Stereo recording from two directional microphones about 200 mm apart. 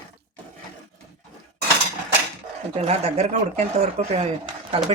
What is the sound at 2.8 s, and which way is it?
Speech, 30° right (ahead or behind).